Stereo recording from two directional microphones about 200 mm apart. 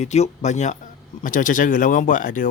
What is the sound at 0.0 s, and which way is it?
Speech, 35° left (ahead or behind).